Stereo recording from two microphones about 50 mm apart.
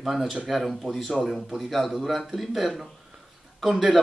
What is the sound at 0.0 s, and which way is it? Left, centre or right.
Speech, centre.